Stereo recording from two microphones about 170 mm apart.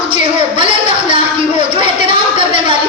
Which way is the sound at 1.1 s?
30° right (ahead or behind).